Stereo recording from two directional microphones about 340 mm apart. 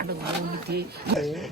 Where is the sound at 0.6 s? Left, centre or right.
Right.